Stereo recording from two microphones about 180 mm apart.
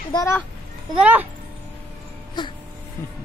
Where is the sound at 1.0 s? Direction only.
10° right (ahead or behind).